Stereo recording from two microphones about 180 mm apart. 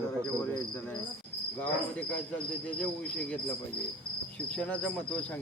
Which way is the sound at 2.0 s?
5° left (ahead or behind).